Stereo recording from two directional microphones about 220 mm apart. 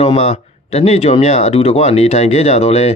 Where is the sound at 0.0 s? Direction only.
30° left (ahead or behind).